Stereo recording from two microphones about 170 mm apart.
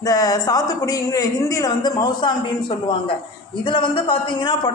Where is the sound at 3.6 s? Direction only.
30° left (ahead or behind).